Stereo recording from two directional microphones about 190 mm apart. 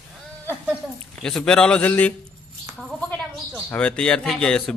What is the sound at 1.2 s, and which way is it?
Speech, 5° left (ahead or behind).